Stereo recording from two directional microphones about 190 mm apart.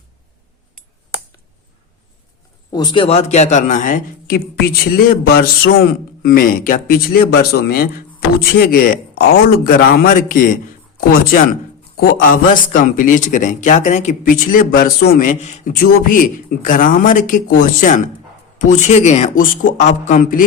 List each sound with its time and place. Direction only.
2.6 s a man's voice: 20° left (ahead or behind); by 20.4 s 40° left (ahead or behind)